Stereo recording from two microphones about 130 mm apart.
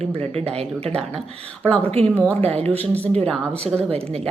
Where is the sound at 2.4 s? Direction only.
50° right (ahead or behind).